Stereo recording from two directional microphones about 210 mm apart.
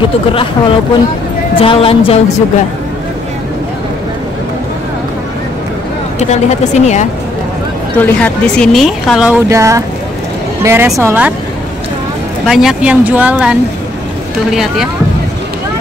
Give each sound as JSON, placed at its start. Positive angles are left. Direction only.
{"t": 1.6, "sound": "a woman's voice", "side_deg": 25}
{"t": 6.1, "sound": "speech", "side_deg": 30}
{"t": 8.0, "sound": "a woman's voice", "side_deg": 5}
{"t": 12.4, "sound": "a woman's voice", "side_deg": 0}